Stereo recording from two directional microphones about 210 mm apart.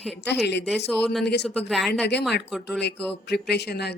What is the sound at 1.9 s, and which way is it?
Speech, 55° left (ahead or behind).